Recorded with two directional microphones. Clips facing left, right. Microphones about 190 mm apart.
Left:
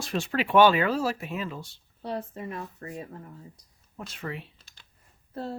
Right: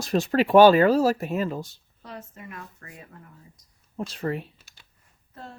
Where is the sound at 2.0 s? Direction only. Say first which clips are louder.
Left 7 dB; 30° left (ahead or behind).